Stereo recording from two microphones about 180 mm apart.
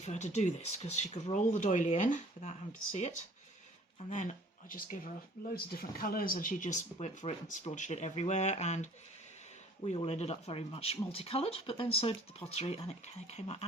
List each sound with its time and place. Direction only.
0.0 s speech: 40° left (ahead or behind)
5.5 s speech: 55° left (ahead or behind); by 13.7 s 35° left (ahead or behind)